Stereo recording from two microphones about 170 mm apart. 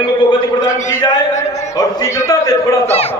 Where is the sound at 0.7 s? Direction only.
45° left (ahead or behind).